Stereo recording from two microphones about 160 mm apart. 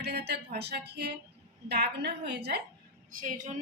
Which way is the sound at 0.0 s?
90° right.